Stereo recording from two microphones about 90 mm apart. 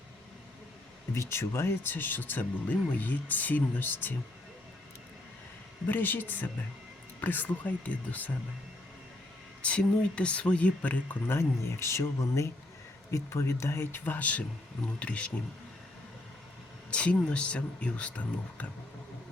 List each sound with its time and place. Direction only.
1.1 s speech: 30° left (ahead or behind)
5.9 s speech: 20° left (ahead or behind)
9.6 s speech: 15° left (ahead or behind)
11.3 s speech: 30° left (ahead or behind); by 15.3 s 15° left (ahead or behind)
16.9 s speech: 15° left (ahead or behind)